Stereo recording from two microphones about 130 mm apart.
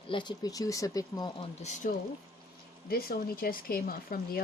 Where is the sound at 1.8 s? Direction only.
90° left.